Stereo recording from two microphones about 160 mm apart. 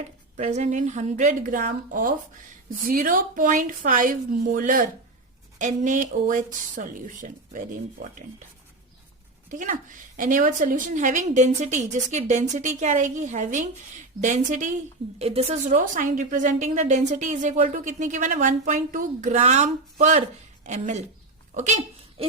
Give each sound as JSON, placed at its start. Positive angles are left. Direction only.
{"t": 0.3, "sound": "a woman's voice", "side_deg": -45}
{"t": 9.5, "sound": "a woman's voice", "side_deg": -55}
{"t": 15.8, "sound": "a woman's voice", "side_deg": -55}